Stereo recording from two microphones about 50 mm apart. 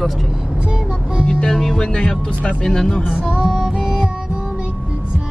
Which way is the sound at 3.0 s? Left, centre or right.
Centre.